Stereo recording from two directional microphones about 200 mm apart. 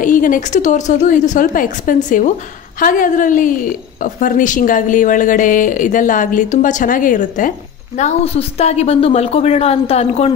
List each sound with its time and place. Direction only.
0.0 s a woman's voice: 40° left (ahead or behind)